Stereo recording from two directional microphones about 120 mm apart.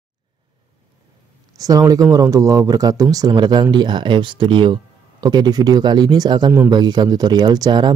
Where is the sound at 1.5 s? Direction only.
30° right (ahead or behind).